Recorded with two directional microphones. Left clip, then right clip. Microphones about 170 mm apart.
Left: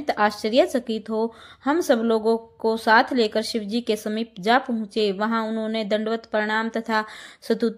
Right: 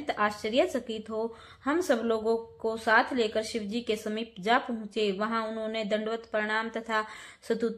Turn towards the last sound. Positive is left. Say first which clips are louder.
# left 6 dB
turn(degrees=35)  # may be behind; listen again after turning